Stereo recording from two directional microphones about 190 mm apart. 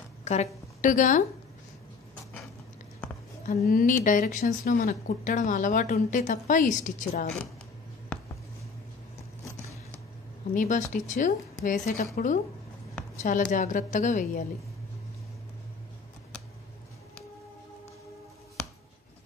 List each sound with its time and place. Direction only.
0.2 s a woman's voice: 35° left (ahead or behind)
3.4 s speech: 45° left (ahead or behind)
10.5 s a woman's voice: 40° left (ahead or behind)